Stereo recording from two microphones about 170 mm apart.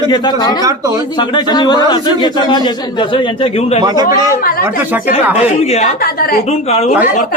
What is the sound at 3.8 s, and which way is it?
Speech, 25° right (ahead or behind).